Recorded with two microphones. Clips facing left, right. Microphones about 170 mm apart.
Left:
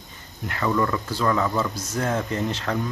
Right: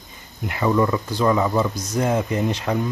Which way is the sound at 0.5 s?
15° right (ahead or behind).